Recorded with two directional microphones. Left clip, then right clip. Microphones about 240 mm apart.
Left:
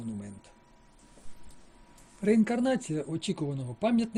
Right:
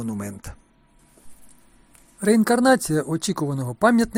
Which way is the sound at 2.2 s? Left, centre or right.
Centre.